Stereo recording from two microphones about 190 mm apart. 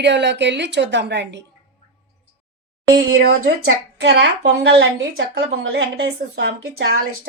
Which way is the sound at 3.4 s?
60° right (ahead or behind).